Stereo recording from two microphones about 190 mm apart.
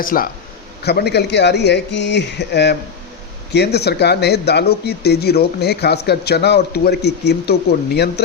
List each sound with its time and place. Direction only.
0.0 s a man's voice: 50° left (ahead or behind)
0.9 s speech: 60° left (ahead or behind)